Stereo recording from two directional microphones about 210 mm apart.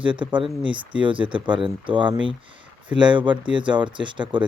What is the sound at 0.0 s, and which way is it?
Speech, 25° right (ahead or behind).